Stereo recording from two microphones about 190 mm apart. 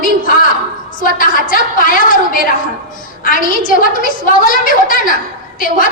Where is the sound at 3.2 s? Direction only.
45° left (ahead or behind).